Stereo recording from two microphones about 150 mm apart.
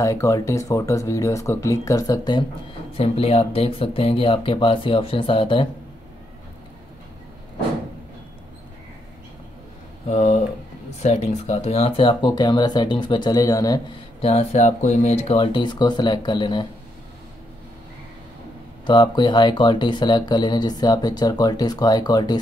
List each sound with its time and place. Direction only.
0.0 s speech: 20° left (ahead or behind)
3.0 s speech: 40° left (ahead or behind)
10.0 s speech: 45° left (ahead or behind); by 13.7 s 25° left (ahead or behind)
14.2 s speech: 45° left (ahead or behind)
15.3 s speech: 30° left (ahead or behind)
18.9 s speech: 30° left (ahead or behind)